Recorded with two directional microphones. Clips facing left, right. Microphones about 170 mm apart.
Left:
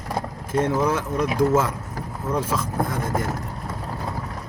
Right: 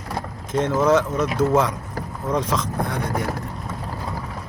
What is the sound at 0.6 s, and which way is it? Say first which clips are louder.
Speech: even; 10° left (ahead or behind).